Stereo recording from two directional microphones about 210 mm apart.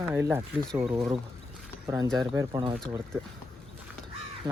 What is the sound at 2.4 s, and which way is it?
Speech, 20° right (ahead or behind).